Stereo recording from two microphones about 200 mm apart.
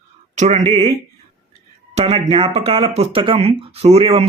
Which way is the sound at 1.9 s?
30° right (ahead or behind).